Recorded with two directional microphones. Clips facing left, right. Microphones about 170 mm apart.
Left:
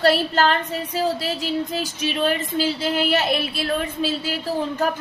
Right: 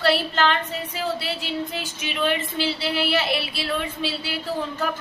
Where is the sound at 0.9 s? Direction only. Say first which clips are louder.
Left 5 dB; 40° left (ahead or behind).